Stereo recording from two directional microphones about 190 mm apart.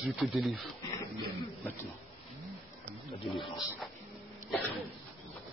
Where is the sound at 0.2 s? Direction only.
Centre (ahead or behind).